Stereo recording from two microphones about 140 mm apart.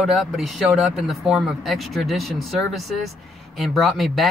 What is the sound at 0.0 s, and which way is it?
Speech, centre (ahead or behind).